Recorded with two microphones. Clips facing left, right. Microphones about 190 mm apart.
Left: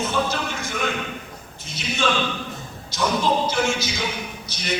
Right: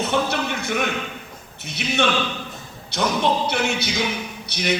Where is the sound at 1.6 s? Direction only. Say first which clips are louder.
Right 2 dB; 65° right (ahead or behind).